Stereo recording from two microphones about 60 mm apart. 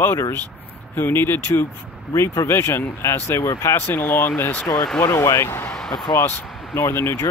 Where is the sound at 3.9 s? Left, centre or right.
Left.